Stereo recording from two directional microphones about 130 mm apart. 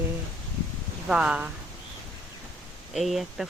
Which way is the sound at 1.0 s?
5° right (ahead or behind).